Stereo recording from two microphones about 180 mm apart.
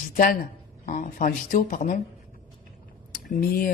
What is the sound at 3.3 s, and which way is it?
Speech, 50° left (ahead or behind).